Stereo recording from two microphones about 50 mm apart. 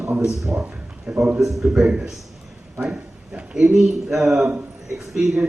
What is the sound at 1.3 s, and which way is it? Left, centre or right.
Speech, centre.